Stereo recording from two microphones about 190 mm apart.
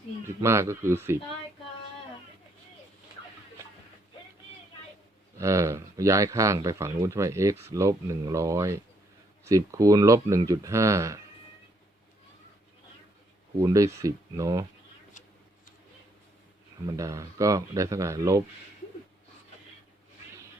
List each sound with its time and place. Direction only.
0.3 s speech: 15° right (ahead or behind)
5.4 s speech: 15° right (ahead or behind)
13.6 s speech: 15° right (ahead or behind)
16.8 s speech: 15° right (ahead or behind)